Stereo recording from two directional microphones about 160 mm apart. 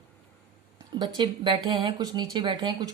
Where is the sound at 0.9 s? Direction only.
30° right (ahead or behind).